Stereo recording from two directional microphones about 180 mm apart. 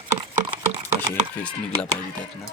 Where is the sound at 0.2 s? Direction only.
25° right (ahead or behind).